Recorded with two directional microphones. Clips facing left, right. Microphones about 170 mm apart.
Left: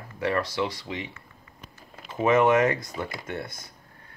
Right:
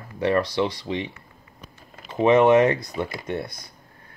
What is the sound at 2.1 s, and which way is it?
Speech, 20° right (ahead or behind).